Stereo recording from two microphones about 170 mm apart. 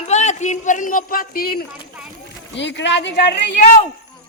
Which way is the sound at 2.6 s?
90° left.